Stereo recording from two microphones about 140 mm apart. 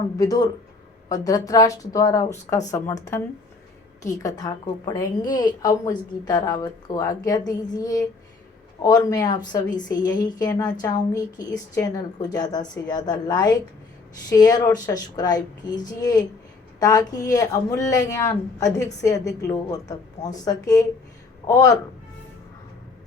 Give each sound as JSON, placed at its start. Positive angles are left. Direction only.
{"t": 0.2, "sound": "a woman's voice", "side_deg": 25}